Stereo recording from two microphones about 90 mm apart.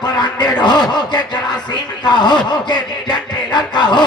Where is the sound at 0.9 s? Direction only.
55° left (ahead or behind).